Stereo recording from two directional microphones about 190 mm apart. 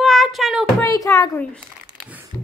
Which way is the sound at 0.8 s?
15° left (ahead or behind).